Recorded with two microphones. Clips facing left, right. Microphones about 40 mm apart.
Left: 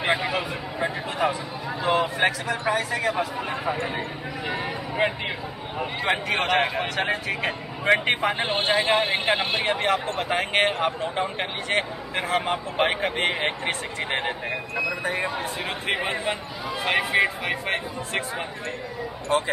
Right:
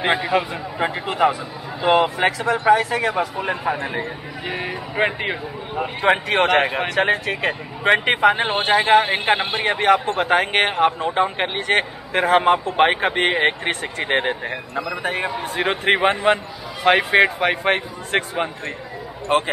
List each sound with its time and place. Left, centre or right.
0.3 s a man's voice: right; by 5.9 s centre
6.0 s a man's voice: right
8.4 s a man's voice: centre
9.7 s a man's voice: right
15.4 s a man's voice: right